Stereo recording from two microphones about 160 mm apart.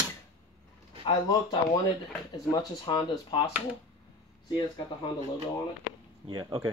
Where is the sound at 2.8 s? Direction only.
25° left (ahead or behind).